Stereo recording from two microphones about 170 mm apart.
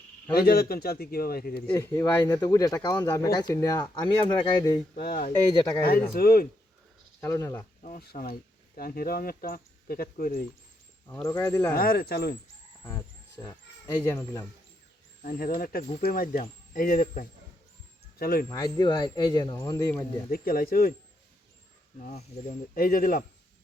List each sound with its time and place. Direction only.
0.3 s speech: 65° left (ahead or behind)
1.7 s speech: 15° left (ahead or behind)
4.9 s speech: 65° left (ahead or behind)
7.2 s speech: 15° left (ahead or behind)
7.9 s speech: 60° left (ahead or behind)
11.1 s speech: 15° left (ahead or behind)
11.7 s speech: 60° left (ahead or behind)
12.8 s speech: 20° left (ahead or behind)
15.2 s speech: 55° left (ahead or behind)
18.4 s speech: 25° left (ahead or behind)
20.3 s speech: 60° left (ahead or behind)
22.0 s speech: 50° left (ahead or behind)